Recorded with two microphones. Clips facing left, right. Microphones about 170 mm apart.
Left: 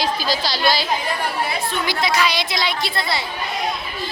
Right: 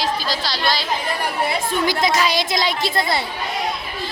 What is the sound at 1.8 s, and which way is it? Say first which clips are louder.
A woman's voice: right 1 dB; 45° right (ahead or behind).